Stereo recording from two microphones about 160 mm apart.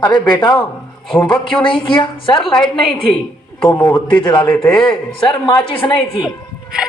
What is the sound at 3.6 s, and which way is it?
A man's voice, 10° left (ahead or behind).